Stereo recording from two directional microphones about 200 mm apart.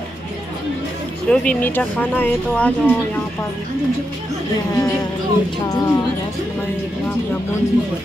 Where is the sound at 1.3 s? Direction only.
5° left (ahead or behind).